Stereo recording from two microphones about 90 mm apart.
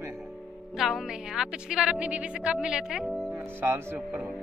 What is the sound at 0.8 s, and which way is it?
Speech, 5° right (ahead or behind).